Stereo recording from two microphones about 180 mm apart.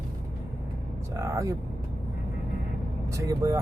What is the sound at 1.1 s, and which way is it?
Speech, 15° right (ahead or behind).